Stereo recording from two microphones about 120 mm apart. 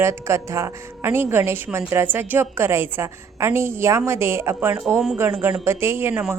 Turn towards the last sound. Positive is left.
turn(degrees=-20)  # may be behind; listen again after turning